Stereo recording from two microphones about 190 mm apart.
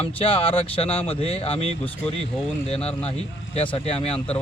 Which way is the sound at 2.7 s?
30° left (ahead or behind).